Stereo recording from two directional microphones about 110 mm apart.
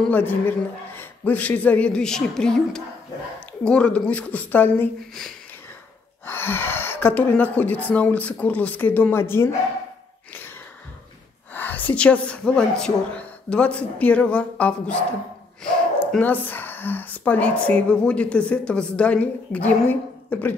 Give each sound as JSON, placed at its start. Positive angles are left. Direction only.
{"t": 0.1, "sound": "a woman's voice", "side_deg": 15}
{"t": 6.2, "sound": "a woman's voice", "side_deg": 20}
{"t": 11.5, "sound": "a woman's voice", "side_deg": 15}
{"t": 16.2, "sound": "a woman's voice", "side_deg": 15}